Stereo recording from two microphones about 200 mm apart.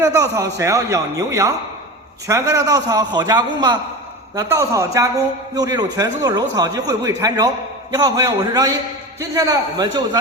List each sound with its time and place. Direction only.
0.0 s a man's voice: 15° right (ahead or behind)